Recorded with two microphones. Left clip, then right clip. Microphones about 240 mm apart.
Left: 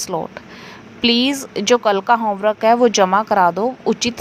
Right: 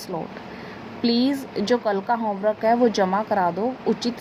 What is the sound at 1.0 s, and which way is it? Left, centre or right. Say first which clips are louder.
A woman's voice: left 6 dB; left.